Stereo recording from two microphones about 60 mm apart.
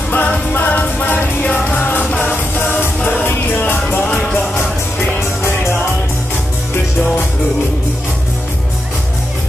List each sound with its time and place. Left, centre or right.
0.1 s music: left
2.2 s music: left